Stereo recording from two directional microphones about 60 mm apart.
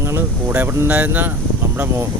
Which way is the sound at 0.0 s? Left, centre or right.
Right.